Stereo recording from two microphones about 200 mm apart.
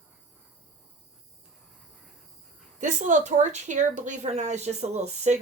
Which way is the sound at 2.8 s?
35° right (ahead or behind).